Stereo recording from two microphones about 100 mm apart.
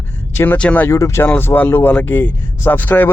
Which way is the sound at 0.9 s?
30° left (ahead or behind).